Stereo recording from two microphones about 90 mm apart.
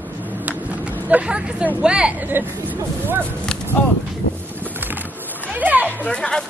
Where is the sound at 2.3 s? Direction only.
25° right (ahead or behind).